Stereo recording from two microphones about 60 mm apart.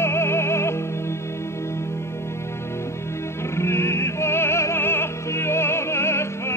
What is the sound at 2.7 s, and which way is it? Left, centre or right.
Music, left.